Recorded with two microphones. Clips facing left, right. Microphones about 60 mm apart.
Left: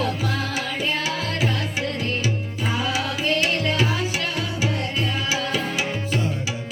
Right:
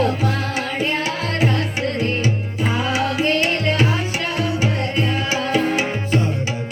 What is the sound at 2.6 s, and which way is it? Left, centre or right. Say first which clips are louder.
Music: right 4 dB; right.